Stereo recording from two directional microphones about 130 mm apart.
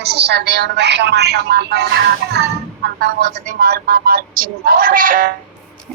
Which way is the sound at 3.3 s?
70° right (ahead or behind).